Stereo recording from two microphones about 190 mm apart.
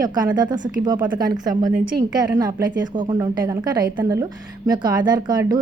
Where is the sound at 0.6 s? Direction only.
45° right (ahead or behind).